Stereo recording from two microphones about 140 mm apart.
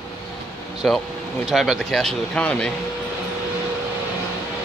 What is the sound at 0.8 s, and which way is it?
Speech, 5° left (ahead or behind).